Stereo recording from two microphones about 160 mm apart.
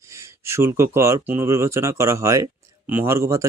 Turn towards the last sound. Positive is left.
turn(degrees=-20)  # may be behind; listen again after turning